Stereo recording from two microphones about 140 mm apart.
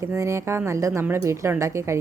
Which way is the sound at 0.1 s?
20° right (ahead or behind).